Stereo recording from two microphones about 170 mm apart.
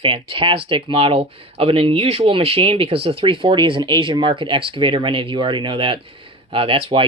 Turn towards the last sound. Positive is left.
turn(degrees=-30)  # may be behind; listen again after turning